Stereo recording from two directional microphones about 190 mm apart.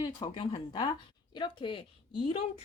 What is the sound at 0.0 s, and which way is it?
Speech, 25° left (ahead or behind).